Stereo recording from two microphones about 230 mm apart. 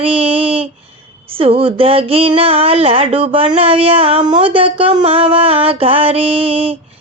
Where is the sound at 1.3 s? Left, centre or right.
Right.